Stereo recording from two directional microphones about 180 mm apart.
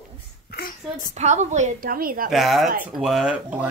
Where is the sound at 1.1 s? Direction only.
40° right (ahead or behind).